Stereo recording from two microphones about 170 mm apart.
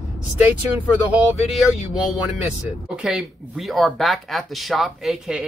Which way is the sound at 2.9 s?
5° right (ahead or behind).